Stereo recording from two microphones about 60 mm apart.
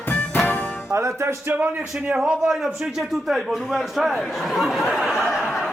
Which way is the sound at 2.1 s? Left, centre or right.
Centre.